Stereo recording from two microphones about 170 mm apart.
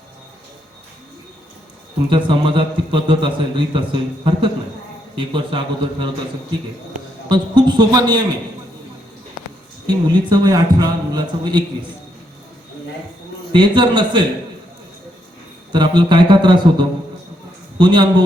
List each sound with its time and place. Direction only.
2.0 s a man's voice: 30° right (ahead or behind)
7.3 s a man's voice: 25° right (ahead or behind)
9.8 s a man's voice: 25° right (ahead or behind)
13.5 s a man's voice: 25° right (ahead or behind)
15.7 s a man's voice: 25° right (ahead or behind)